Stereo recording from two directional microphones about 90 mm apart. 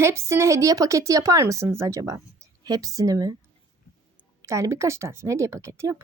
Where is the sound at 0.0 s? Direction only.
30° right (ahead or behind).